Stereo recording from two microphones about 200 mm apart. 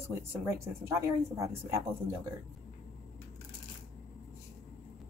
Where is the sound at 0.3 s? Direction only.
10° right (ahead or behind).